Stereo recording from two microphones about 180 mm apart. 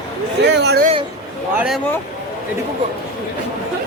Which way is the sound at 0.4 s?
70° right (ahead or behind).